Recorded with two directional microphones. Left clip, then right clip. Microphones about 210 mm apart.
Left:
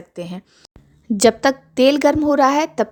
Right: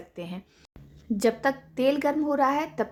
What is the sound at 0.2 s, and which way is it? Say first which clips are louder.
A woman's voice: left 8 dB; 35° left (ahead or behind).